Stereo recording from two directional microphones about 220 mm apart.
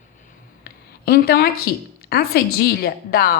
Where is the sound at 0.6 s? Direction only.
45° left (ahead or behind).